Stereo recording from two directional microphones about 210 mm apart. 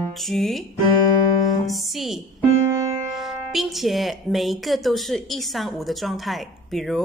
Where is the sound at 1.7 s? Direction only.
Centre (ahead or behind).